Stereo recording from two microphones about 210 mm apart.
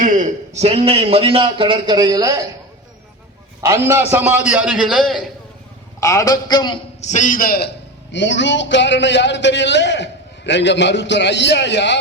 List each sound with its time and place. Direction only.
0.0 s a man's voice: 35° right (ahead or behind); by 2.4 s 20° right (ahead or behind)
3.6 s a man's voice: 15° right (ahead or behind)
6.0 s a man's voice: 15° left (ahead or behind)
7.0 s a man's voice: 35° left (ahead or behind)
8.1 s a man's voice: 60° left (ahead or behind)